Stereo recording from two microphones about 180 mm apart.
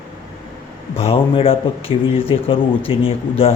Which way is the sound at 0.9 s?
35° left (ahead or behind).